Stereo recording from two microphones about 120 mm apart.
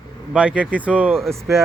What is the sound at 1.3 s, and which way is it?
Speech, 25° right (ahead or behind).